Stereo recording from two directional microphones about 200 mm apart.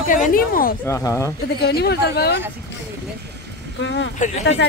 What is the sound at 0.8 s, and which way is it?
Speech, 15° left (ahead or behind).